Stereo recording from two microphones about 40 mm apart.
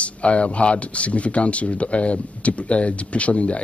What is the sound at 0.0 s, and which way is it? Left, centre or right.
Speech, left.